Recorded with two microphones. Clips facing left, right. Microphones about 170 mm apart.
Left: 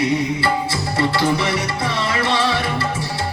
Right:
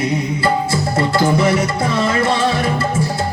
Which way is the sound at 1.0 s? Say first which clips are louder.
Right 3 dB; 50° right (ahead or behind).